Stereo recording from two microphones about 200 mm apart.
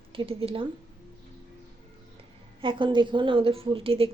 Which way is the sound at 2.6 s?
25° right (ahead or behind).